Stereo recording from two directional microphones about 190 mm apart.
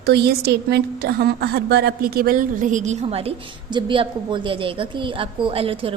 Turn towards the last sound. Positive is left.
turn(degrees=-30)  # may be behind; listen again after turning